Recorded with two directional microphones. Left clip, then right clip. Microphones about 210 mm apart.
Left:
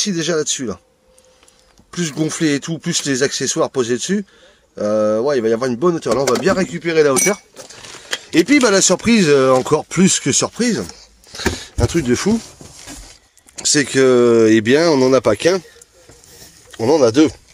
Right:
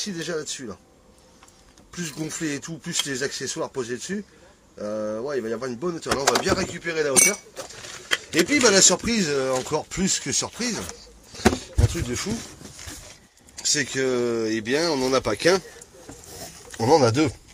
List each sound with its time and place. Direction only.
0.0 s speech: 5° left (ahead or behind)
1.9 s speech: 5° left (ahead or behind)
6.7 s speech: 25° left (ahead or behind)
8.3 s speech: 40° left (ahead or behind); by 10.8 s 15° left (ahead or behind)
11.3 s a sound: 45° left (ahead or behind)
13.6 s speech: 25° left (ahead or behind)
16.7 s speech: centre (ahead or behind)